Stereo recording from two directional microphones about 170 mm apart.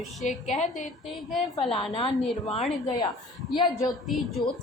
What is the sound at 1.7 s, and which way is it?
Speech, 35° left (ahead or behind).